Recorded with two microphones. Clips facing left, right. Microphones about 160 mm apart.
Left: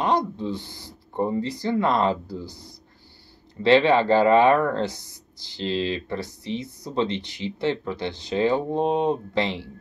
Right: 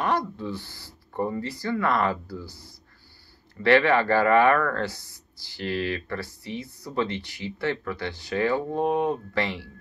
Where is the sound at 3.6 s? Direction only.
20° left (ahead or behind).